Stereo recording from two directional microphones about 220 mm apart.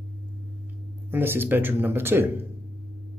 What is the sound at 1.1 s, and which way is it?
Speech, 10° right (ahead or behind).